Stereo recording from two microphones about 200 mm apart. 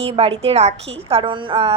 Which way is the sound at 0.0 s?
30° right (ahead or behind).